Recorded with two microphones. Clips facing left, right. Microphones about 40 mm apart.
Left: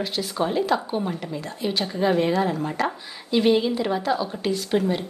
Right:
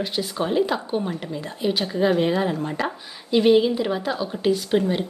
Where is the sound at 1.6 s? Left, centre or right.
Centre.